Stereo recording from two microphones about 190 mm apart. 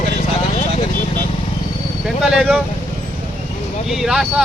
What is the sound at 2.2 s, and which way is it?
Speech, 5° right (ahead or behind).